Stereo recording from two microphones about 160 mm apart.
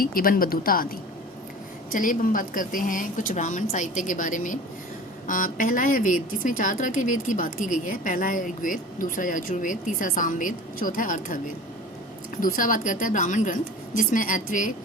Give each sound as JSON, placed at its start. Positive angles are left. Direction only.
{"t": 0.0, "sound": "speech", "side_deg": 65}
{"t": 12.4, "sound": "speech", "side_deg": 60}